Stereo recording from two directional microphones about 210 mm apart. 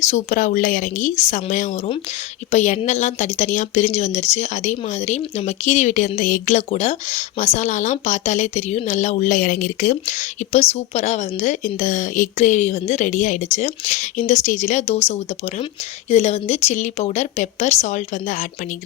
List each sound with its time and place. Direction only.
0.0 s a woman's voice: 35° left (ahead or behind)